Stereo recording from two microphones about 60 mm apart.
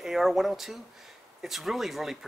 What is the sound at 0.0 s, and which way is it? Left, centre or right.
Speech, centre.